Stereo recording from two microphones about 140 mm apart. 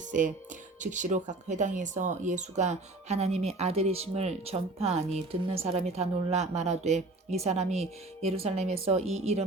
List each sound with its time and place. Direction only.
0.1 s speech: 65° right (ahead or behind); by 9.4 s 50° right (ahead or behind)